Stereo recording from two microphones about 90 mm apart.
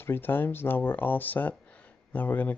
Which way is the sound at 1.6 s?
15° left (ahead or behind).